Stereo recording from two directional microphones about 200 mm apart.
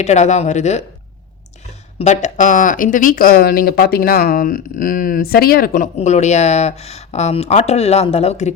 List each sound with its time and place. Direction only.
0.0 s speech: 35° left (ahead or behind)
2.0 s speech: 35° left (ahead or behind)